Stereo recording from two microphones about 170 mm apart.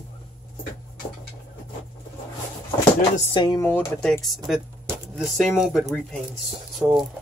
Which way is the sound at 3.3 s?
25° left (ahead or behind).